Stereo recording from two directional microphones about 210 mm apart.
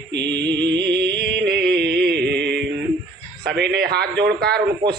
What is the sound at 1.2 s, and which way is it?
Music, 50° right (ahead or behind).